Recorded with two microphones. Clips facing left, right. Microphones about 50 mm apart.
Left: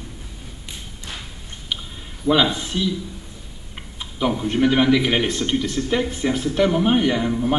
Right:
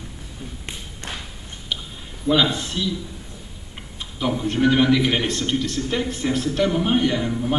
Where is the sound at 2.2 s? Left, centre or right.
Centre.